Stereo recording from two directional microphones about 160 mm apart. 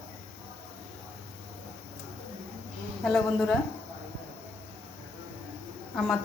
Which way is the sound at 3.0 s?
5° left (ahead or behind).